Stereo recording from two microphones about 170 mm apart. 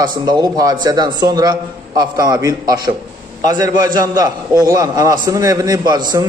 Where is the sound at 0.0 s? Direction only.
25° right (ahead or behind).